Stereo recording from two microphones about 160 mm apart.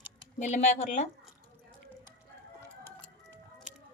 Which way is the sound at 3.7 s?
5° right (ahead or behind).